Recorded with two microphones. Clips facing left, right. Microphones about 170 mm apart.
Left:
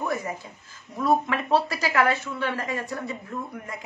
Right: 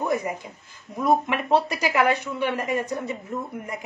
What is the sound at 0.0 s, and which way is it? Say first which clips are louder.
A woman's voice: right 3 dB; 20° right (ahead or behind).